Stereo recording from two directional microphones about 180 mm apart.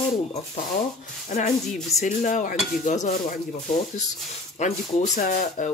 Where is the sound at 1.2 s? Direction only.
40° left (ahead or behind).